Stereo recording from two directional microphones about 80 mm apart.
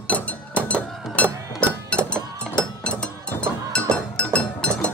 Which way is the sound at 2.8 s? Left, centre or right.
Centre.